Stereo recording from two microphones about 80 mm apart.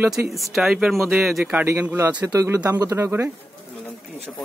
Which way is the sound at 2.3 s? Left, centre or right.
Right.